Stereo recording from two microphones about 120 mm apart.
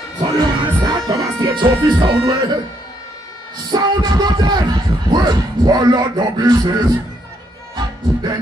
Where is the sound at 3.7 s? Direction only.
35° right (ahead or behind).